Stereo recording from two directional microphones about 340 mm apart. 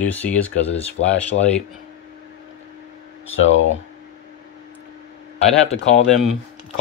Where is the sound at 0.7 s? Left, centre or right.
Centre.